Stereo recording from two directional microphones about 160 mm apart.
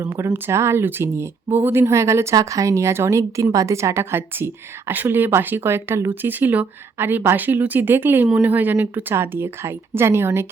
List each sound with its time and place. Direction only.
0.0 s speech: 20° right (ahead or behind)